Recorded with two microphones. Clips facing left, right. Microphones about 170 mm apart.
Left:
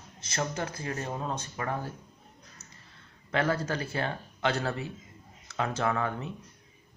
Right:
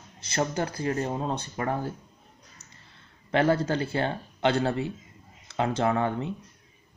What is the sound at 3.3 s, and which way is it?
Speech, 30° right (ahead or behind).